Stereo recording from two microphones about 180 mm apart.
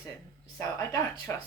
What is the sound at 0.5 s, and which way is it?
Speech, 20° left (ahead or behind).